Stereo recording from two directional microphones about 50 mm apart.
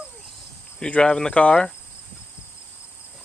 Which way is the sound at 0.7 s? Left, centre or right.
Left.